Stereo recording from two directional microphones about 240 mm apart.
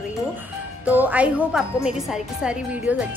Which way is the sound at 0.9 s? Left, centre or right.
Centre.